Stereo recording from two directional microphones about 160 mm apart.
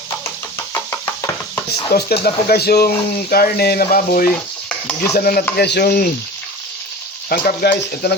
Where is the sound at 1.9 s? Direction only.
75° left (ahead or behind).